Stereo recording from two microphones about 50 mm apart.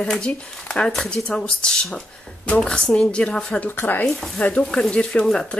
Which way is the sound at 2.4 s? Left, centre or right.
Left.